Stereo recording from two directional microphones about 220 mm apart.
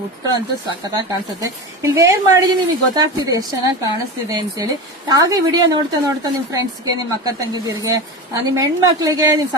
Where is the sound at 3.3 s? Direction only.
15° right (ahead or behind).